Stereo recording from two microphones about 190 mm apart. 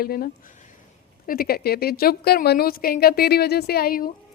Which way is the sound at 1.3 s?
55° left (ahead or behind).